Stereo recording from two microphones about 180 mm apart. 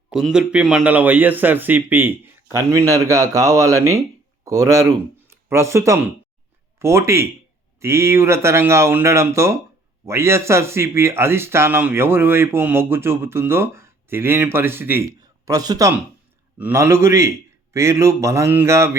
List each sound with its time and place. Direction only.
0.1 s speech: centre (ahead or behind)